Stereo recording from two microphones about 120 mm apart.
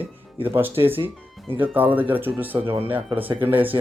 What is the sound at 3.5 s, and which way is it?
Speech, 15° right (ahead or behind).